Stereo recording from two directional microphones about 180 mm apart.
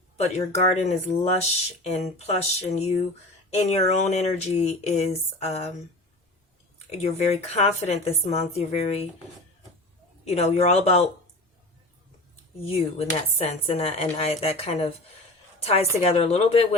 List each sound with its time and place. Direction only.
0.2 s speech: 35° left (ahead or behind)
7.0 s speech: 35° left (ahead or behind)
10.2 s speech: 35° left (ahead or behind)
12.6 s speech: 35° left (ahead or behind)